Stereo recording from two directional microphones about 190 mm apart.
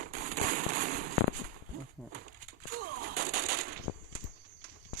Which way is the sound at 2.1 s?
50° right (ahead or behind).